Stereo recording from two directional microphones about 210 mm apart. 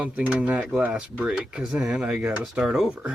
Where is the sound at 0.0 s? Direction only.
5° right (ahead or behind).